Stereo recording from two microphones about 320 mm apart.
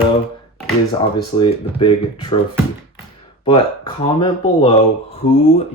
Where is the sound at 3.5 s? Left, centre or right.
Centre.